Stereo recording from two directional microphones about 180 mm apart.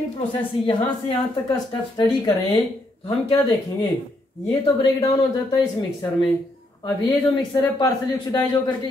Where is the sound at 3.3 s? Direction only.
20° left (ahead or behind).